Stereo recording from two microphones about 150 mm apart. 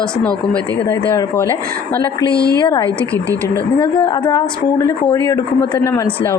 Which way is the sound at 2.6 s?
20° left (ahead or behind).